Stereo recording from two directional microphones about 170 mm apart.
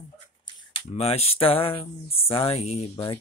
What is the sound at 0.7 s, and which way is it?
Speech, 35° left (ahead or behind).